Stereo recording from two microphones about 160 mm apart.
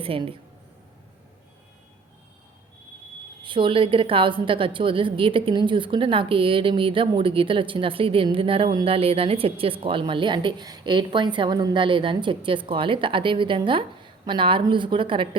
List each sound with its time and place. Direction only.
0.0 s a woman's voice: 35° right (ahead or behind)
3.4 s a woman's voice: 30° right (ahead or behind)